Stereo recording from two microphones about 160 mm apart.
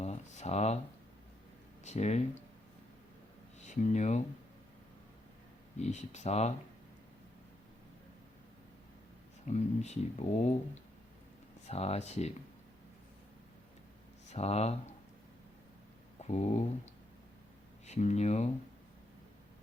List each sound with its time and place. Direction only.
0.0 s a sound: 45° left (ahead or behind)
1.8 s speech: 45° left (ahead or behind)
3.7 s speech: 45° left (ahead or behind)
5.8 s speech: 45° left (ahead or behind)
9.5 s speech: 45° left (ahead or behind)
11.7 s speech: 40° left (ahead or behind)
14.3 s speech: 40° left (ahead or behind)
16.2 s speech: 45° left (ahead or behind)
17.8 s speech: 45° left (ahead or behind)